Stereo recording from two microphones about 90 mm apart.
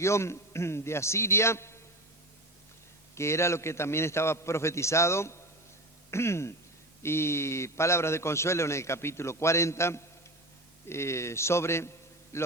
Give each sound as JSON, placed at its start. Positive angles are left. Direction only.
{"t": 0.0, "sound": "a man's voice", "side_deg": 30}
{"t": 3.2, "sound": "a man's voice", "side_deg": 30}